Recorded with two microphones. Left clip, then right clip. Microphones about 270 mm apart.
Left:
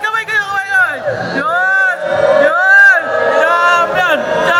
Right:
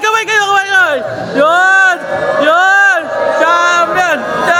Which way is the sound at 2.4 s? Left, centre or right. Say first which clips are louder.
Right 1 dB; right.